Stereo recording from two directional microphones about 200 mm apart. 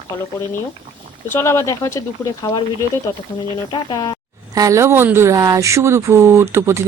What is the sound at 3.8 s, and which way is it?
Speech, 20° left (ahead or behind).